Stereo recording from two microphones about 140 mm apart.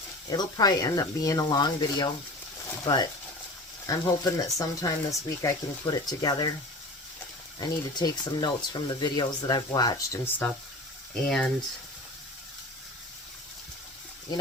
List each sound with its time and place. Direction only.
0.3 s speech: 30° left (ahead or behind)
7.6 s speech: 30° left (ahead or behind)
11.1 s speech: 5° left (ahead or behind)